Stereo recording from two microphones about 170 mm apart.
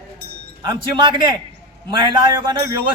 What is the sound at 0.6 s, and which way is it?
A man's voice, 30° right (ahead or behind).